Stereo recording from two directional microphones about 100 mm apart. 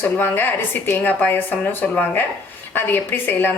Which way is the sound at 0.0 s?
20° left (ahead or behind).